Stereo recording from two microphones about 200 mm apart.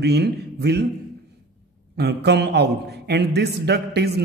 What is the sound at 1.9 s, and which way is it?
A man's voice, 55° right (ahead or behind).